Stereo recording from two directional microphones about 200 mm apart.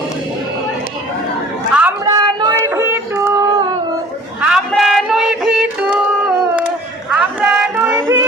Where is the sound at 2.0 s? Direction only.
20° right (ahead or behind).